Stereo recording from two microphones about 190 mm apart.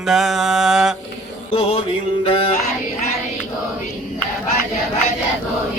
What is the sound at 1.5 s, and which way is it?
Mantra, 30° left (ahead or behind).